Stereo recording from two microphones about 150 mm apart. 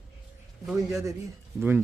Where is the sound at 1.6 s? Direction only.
10° right (ahead or behind).